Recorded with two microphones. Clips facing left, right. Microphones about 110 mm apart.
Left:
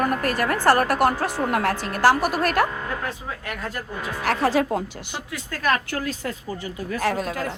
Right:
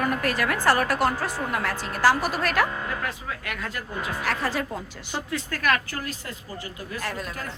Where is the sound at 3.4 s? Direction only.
40° left (ahead or behind).